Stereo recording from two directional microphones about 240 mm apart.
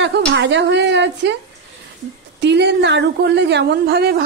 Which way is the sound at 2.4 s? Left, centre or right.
Right.